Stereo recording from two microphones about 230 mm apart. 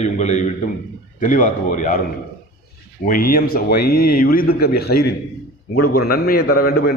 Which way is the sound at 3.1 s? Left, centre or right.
Left.